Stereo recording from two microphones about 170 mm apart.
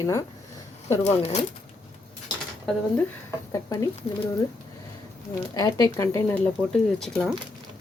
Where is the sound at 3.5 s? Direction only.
20° left (ahead or behind).